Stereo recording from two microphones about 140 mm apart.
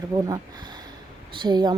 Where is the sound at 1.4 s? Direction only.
30° right (ahead or behind).